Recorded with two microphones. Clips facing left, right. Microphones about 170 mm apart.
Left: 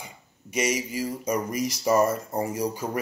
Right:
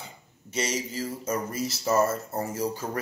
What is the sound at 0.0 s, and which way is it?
A man's voice, 10° left (ahead or behind).